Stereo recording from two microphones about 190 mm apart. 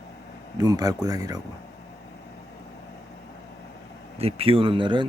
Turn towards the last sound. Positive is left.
turn(degrees=-25)  # may be behind; listen again after turning